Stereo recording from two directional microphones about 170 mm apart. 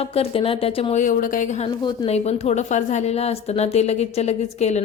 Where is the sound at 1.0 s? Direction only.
55° left (ahead or behind).